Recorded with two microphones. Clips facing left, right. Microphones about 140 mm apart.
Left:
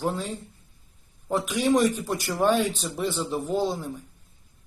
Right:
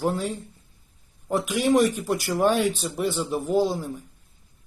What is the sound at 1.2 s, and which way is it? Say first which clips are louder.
A man's voice: right 1 dB; 10° right (ahead or behind).